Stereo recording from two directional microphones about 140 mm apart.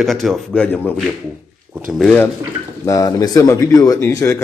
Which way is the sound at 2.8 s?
20° left (ahead or behind).